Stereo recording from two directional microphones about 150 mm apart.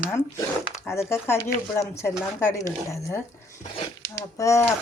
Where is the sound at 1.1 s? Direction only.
15° left (ahead or behind).